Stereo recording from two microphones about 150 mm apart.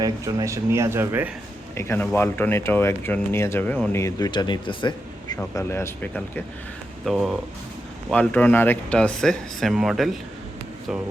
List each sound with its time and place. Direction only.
0.0 s speech: 25° right (ahead or behind)
1.7 s speech: 15° left (ahead or behind)
5.4 s speech: 15° left (ahead or behind)
7.0 s speech: centre (ahead or behind)